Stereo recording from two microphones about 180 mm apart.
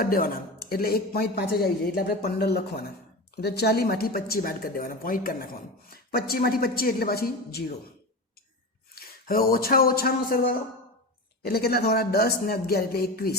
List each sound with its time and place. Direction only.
0.0 s speech: 55° left (ahead or behind)
9.0 s speech: 55° left (ahead or behind)